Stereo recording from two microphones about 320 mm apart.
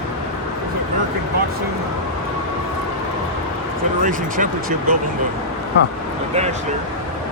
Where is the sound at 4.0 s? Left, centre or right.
Right.